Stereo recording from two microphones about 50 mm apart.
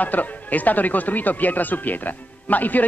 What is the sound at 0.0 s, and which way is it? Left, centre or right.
Speech, left.